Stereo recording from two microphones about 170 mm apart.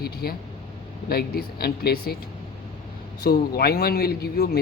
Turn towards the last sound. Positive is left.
turn(degrees=65)  # may be behind; listen again after turning